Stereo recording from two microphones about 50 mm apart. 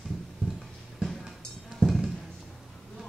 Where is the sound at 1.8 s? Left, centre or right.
Right.